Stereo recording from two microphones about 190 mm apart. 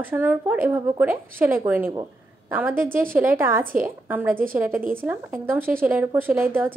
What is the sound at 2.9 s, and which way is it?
Speech, 45° right (ahead or behind).